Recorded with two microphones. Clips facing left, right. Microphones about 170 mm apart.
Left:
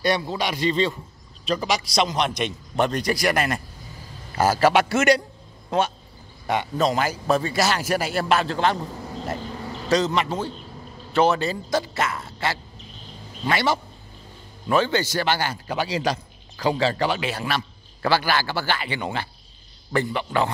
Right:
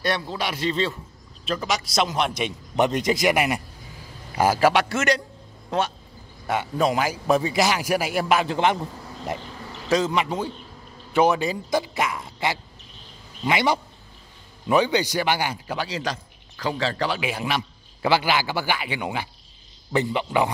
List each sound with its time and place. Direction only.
0.0 s a man's voice: centre (ahead or behind)
2.7 s a man's voice: 20° right (ahead or behind)
4.7 s a man's voice: 10° left (ahead or behind)
6.4 s a man's voice: 5° right (ahead or behind)
9.8 s a man's voice: 10° right (ahead or behind)
15.7 s a man's voice: 5° left (ahead or behind)
17.2 s a man's voice: 10° right (ahead or behind)